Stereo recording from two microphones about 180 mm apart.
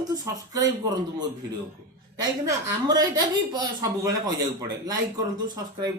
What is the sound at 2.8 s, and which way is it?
Speech, 20° right (ahead or behind).